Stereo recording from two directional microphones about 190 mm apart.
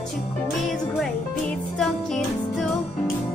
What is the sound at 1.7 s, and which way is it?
Music, centre (ahead or behind).